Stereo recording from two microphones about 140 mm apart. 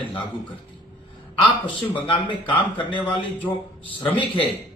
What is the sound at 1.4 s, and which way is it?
A man's voice, 35° left (ahead or behind).